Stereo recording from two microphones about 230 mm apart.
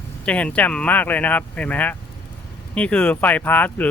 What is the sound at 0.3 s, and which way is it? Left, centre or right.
Speech, centre.